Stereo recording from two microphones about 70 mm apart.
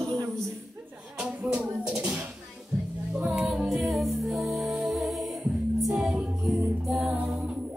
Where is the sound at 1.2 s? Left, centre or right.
Centre.